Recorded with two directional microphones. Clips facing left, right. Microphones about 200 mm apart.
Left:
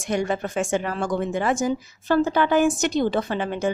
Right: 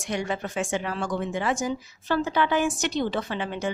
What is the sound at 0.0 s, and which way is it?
Speech, 50° left (ahead or behind).